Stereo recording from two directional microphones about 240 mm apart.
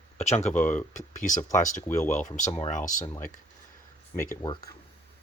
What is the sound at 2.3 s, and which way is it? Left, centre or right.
Speech, left.